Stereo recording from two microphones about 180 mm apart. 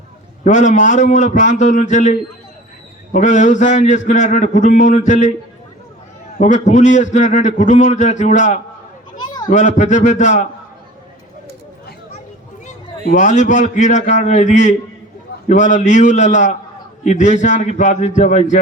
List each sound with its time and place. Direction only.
0.4 s a man's voice: 40° left (ahead or behind)
6.4 s a man's voice: 40° left (ahead or behind)
9.1 s children playing: 25° left (ahead or behind)
9.5 s a man's voice: 40° left (ahead or behind)
13.1 s a man's voice: 40° left (ahead or behind)